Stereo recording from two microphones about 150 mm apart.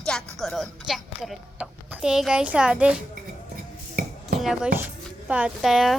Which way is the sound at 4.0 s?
75° right (ahead or behind).